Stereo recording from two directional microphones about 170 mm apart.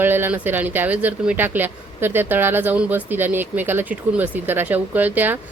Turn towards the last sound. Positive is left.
turn(degrees=-10)  # may be behind; listen again after turning